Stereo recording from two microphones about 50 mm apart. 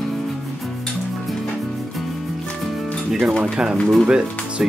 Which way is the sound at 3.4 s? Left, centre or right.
Centre.